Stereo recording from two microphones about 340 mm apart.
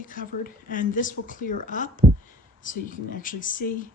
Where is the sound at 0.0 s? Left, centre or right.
Left.